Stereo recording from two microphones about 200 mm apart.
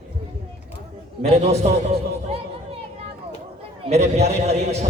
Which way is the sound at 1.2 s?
35° right (ahead or behind).